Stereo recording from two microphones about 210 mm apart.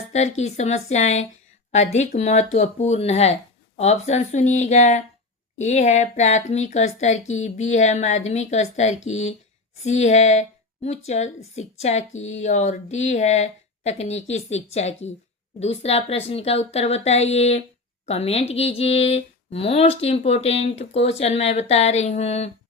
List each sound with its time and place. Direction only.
0.1 s speech: 30° left (ahead or behind)